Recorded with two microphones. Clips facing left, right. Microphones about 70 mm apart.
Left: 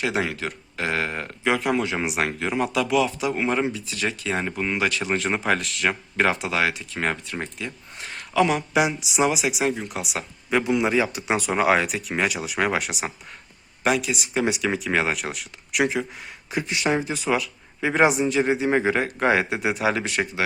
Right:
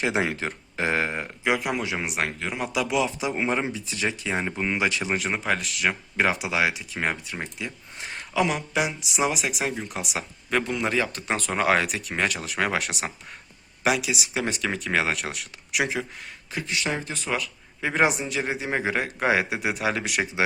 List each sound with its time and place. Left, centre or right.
0.0 s speech: right
1.2 s speech: centre
2.7 s speech: centre
5.2 s speech: centre
7.9 s a sound: centre
8.4 s speech: centre
16.5 s speech: centre